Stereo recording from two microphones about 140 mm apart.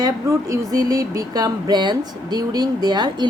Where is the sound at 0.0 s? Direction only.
25° right (ahead or behind).